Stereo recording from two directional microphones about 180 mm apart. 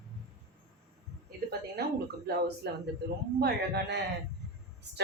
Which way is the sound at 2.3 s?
65° right (ahead or behind).